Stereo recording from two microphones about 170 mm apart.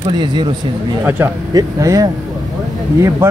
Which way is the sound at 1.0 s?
15° right (ahead or behind).